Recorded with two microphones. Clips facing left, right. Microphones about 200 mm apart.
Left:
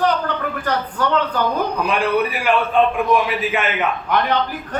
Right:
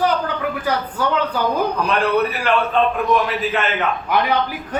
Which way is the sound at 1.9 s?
15° left (ahead or behind).